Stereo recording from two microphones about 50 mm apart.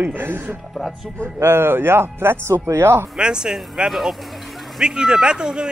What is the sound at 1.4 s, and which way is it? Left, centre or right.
Speech, right.